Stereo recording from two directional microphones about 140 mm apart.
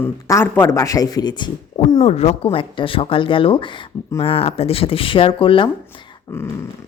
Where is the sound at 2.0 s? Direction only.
45° left (ahead or behind).